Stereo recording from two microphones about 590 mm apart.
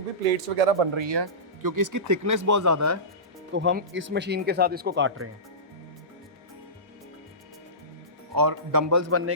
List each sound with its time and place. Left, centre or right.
0.5 s speech: right; by 5.3 s centre
8.4 s speech: right